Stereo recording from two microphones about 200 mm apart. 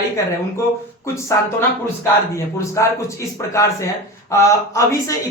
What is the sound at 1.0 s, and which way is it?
Speech, 15° left (ahead or behind).